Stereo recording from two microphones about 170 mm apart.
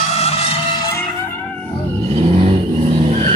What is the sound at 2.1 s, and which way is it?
Vehicle, 35° right (ahead or behind).